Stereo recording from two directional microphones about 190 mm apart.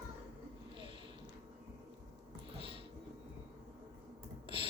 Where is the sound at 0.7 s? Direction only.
25° right (ahead or behind).